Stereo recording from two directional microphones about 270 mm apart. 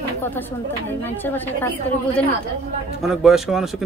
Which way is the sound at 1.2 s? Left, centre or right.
Centre.